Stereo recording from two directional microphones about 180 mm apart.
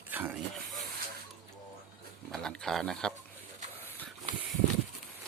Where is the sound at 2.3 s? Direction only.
5° left (ahead or behind).